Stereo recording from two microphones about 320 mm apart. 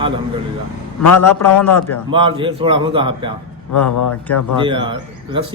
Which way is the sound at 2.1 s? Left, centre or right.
Centre.